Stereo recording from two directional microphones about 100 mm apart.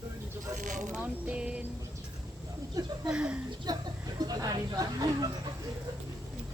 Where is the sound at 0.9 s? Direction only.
15° right (ahead or behind).